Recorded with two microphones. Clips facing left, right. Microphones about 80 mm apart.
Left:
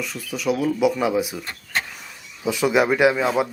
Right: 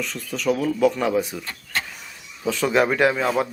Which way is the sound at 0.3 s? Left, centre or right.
Centre.